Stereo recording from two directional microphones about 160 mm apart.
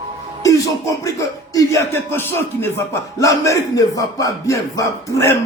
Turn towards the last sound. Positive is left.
turn(degrees=15)  # may be behind; listen again after turning